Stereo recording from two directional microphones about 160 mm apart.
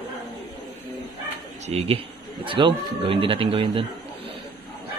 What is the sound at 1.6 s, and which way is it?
A man's voice, 40° right (ahead or behind).